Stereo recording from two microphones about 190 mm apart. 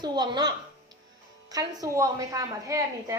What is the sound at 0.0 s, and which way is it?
A woman's voice, 20° right (ahead or behind).